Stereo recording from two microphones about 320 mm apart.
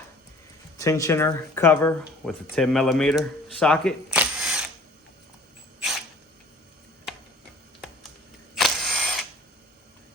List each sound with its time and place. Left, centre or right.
0.8 s speech: centre
8.5 s mechanisms: centre